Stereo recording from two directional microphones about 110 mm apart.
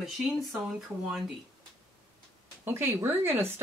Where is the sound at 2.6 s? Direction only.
20° right (ahead or behind).